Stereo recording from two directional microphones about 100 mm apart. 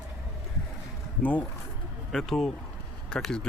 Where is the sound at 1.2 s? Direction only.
15° left (ahead or behind).